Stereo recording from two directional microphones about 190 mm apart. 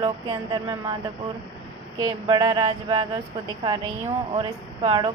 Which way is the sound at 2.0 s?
25° right (ahead or behind).